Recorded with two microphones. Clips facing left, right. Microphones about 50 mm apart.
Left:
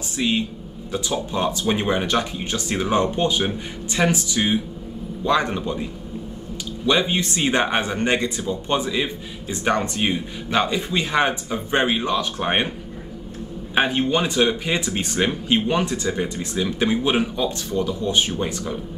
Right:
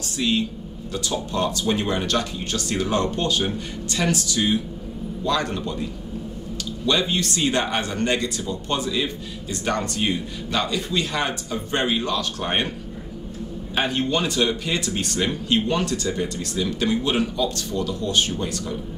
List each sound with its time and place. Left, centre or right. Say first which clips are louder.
0.2 s speech: even; left
6.9 s speech: left 2 dB; centre
13.7 s speech: left 3 dB; centre